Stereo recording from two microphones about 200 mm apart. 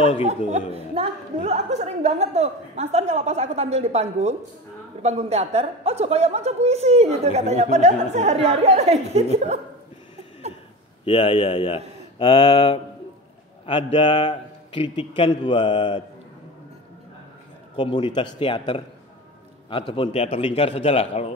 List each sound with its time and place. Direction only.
0.5 s a woman's voice: 30° right (ahead or behind)
11.1 s a man's voice: 25° left (ahead or behind)
17.7 s a man's voice: 25° left (ahead or behind)
19.9 s a man's voice: 30° left (ahead or behind)